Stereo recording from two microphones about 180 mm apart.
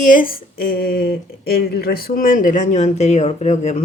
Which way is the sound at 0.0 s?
50° left (ahead or behind).